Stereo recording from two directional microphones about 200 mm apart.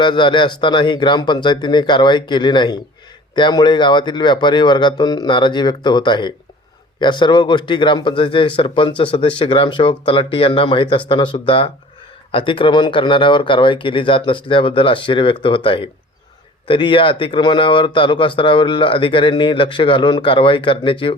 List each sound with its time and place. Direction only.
0.0 s speech: 25° left (ahead or behind)